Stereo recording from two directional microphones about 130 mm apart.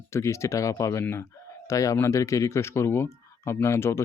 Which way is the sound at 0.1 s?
20° left (ahead or behind).